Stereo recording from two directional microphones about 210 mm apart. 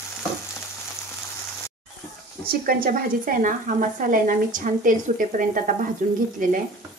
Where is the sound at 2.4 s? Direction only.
45° right (ahead or behind).